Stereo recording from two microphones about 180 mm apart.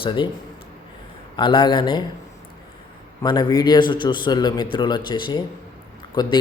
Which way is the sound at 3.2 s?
25° left (ahead or behind).